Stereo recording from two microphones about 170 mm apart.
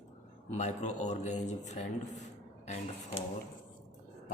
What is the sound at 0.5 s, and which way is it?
Speech, 45° left (ahead or behind).